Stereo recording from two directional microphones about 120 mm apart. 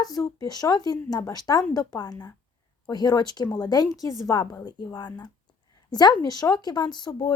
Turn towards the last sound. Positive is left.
turn(degrees=30)  # may be behind; listen again after turning